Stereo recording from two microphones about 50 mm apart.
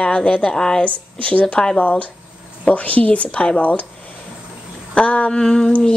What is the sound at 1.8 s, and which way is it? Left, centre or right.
Speech, left.